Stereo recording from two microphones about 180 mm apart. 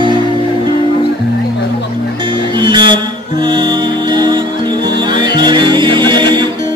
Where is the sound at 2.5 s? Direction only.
25° right (ahead or behind).